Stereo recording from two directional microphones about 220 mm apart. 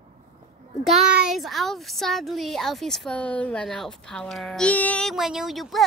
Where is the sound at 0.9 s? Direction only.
Centre (ahead or behind).